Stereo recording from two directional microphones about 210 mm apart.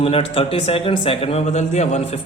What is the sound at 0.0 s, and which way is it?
A man's voice, 25° left (ahead or behind).